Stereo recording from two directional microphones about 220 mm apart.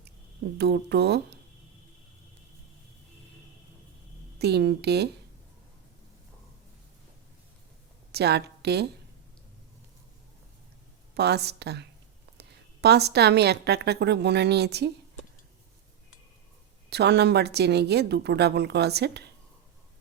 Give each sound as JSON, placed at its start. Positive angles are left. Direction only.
{"t": 0.6, "sound": "a woman's voice", "side_deg": -50}
{"t": 4.4, "sound": "a woman's voice", "side_deg": -50}
{"t": 8.1, "sound": "a woman's voice", "side_deg": -50}
{"t": 11.1, "sound": "a woman's voice", "side_deg": -50}
{"t": 16.9, "sound": "a woman's voice", "side_deg": -50}